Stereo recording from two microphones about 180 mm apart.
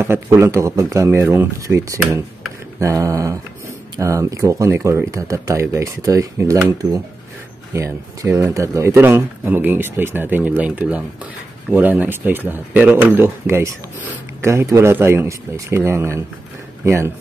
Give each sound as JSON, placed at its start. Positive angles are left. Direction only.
{"t": 0.0, "sound": "speech", "side_deg": -15}
{"t": 7.7, "sound": "speech", "side_deg": -15}